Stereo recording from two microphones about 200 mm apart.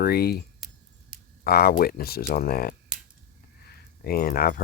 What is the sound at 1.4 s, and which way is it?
Speech, 50° left (ahead or behind).